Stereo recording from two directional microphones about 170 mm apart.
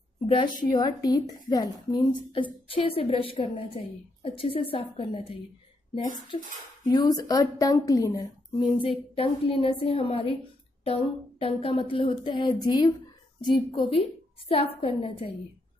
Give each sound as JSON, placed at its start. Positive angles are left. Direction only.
{"t": 0.7, "sound": "a woman's voice", "side_deg": 25}
{"t": 6.9, "sound": "a woman's voice", "side_deg": 25}